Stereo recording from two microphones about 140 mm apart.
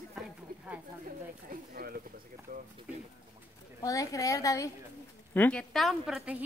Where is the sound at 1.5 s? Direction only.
90° right.